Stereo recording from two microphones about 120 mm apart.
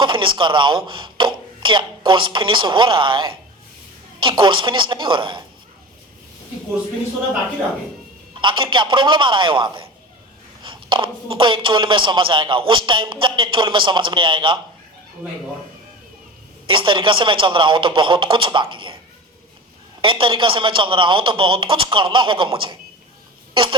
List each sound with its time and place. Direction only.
0.0 s a man's voice: 45° right (ahead or behind)
8.4 s a man's voice: 45° right (ahead or behind)
16.6 s a man's voice: 45° right (ahead or behind)
20.0 s a man's voice: 45° right (ahead or behind)